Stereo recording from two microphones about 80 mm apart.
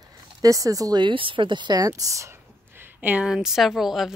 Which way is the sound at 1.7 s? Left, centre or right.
Right.